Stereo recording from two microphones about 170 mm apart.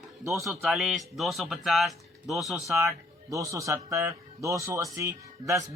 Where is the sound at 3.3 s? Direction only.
20° right (ahead or behind).